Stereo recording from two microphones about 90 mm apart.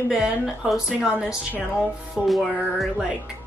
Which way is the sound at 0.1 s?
5° right (ahead or behind).